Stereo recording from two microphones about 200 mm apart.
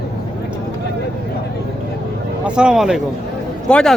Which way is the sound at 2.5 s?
5° right (ahead or behind).